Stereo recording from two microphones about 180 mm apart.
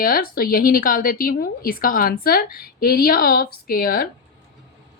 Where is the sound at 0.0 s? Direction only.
55° left (ahead or behind).